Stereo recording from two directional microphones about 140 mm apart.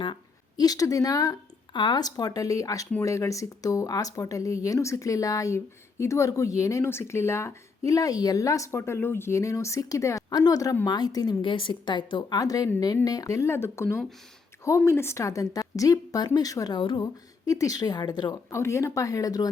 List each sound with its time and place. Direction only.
0.0 s speech: 30° left (ahead or behind)
18.6 s speech: 20° left (ahead or behind)